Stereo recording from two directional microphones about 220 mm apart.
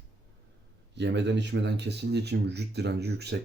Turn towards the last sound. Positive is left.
turn(degrees=-50)  # may be behind; listen again after turning